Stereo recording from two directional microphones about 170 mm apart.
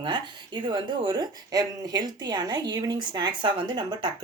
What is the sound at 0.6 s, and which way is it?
A woman's voice, 25° right (ahead or behind).